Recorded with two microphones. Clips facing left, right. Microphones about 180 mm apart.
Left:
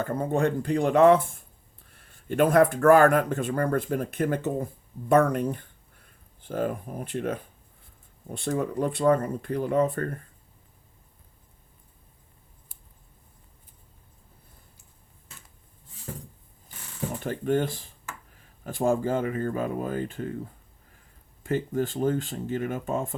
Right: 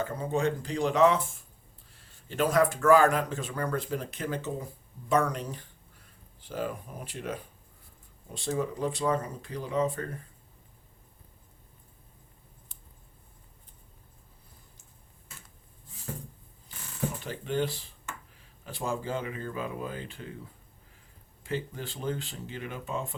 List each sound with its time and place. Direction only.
0.0 s speech: 55° left (ahead or behind)
1.9 s a sound: 55° left (ahead or behind)
2.7 s speech: 55° left (ahead or behind)
17.2 s speech: 50° left (ahead or behind)